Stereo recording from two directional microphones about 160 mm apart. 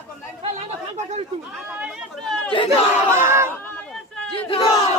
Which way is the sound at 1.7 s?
5° right (ahead or behind).